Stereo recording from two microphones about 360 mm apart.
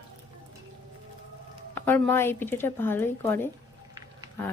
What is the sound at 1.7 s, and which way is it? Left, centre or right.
A woman's voice, centre.